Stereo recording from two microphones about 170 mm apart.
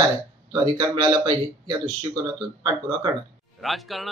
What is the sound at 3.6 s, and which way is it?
Speech, centre (ahead or behind).